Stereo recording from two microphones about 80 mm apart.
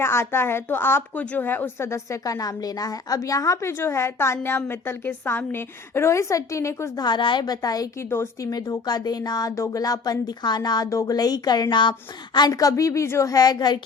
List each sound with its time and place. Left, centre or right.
0.0 s a woman's voice: left
1.1 s a woman's voice: centre; by 6.9 s left
6.9 s a woman's voice: left
7.9 s a woman's voice: left
10.8 s a woman's voice: left
12.5 s a woman's voice: left